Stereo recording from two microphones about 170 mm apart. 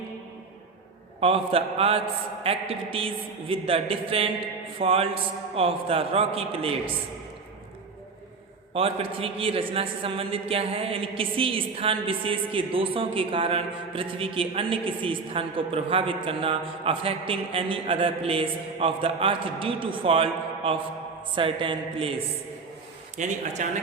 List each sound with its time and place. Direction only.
1.2 s a man's voice: 35° right (ahead or behind)
8.7 s a man's voice: 35° right (ahead or behind)
23.1 s speech: 45° right (ahead or behind)